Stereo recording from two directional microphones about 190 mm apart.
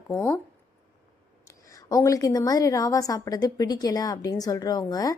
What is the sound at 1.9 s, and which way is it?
A woman's voice, 15° left (ahead or behind).